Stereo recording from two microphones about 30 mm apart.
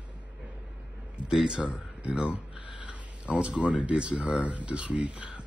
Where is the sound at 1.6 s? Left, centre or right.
Right.